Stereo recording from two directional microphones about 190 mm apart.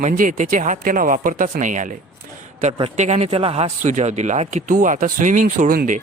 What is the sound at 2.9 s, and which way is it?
Speech, 35° right (ahead or behind).